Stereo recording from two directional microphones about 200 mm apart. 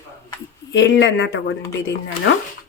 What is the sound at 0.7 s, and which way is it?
Speech, 60° left (ahead or behind).